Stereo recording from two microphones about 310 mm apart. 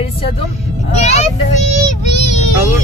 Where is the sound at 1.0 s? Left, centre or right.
Left.